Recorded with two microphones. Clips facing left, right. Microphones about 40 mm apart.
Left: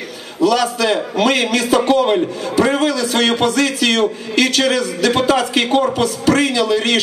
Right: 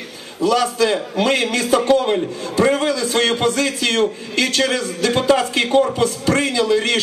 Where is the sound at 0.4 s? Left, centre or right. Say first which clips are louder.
Left 1 dB; left.